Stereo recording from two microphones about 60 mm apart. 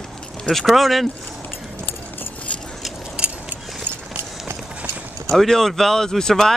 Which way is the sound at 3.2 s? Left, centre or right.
Centre.